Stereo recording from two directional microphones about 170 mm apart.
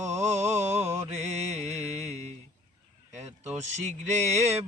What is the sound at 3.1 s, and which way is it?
Speech, 45° right (ahead or behind).